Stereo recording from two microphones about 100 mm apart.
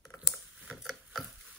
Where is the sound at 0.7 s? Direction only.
5° left (ahead or behind).